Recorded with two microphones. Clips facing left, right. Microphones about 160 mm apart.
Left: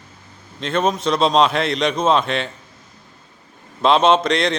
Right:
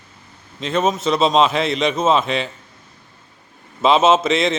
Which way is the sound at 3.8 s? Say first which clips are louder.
Even; 5° right (ahead or behind).